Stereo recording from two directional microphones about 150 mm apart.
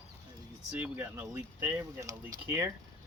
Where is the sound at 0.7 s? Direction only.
10° right (ahead or behind).